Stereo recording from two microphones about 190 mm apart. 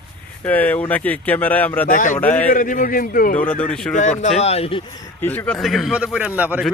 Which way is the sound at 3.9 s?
40° left (ahead or behind).